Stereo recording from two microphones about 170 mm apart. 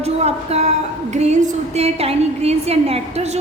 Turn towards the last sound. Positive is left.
turn(degrees=-35)  # may be behind; listen again after turning